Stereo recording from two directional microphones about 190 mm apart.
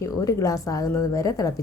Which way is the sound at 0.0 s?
15° left (ahead or behind).